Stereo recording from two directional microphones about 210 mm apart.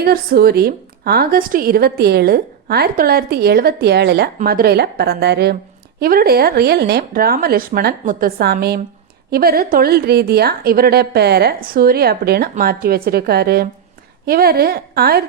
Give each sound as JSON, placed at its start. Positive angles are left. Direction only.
{"t": 0.0, "sound": "a woman's voice", "side_deg": -45}